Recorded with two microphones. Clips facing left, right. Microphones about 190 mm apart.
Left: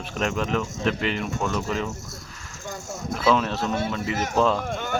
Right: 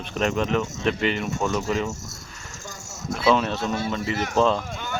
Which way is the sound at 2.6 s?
55° left (ahead or behind).